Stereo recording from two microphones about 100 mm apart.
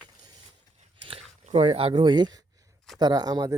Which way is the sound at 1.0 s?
65° right (ahead or behind).